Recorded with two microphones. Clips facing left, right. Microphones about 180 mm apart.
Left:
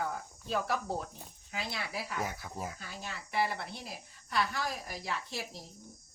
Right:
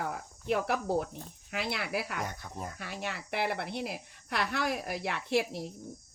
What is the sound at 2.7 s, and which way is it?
Speech, 70° right (ahead or behind).